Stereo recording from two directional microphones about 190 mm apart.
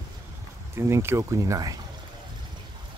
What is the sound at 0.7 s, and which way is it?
Speech, 15° right (ahead or behind).